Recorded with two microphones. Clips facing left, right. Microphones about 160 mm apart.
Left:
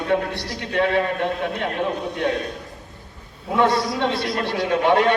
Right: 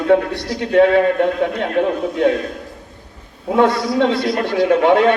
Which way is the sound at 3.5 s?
50° right (ahead or behind).